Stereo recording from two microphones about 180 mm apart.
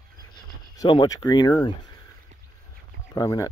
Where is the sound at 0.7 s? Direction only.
25° left (ahead or behind).